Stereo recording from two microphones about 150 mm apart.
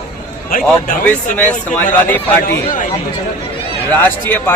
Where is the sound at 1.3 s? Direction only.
10° left (ahead or behind).